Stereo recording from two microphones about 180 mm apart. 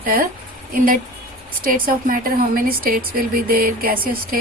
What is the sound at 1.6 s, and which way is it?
A woman's voice, 50° right (ahead or behind).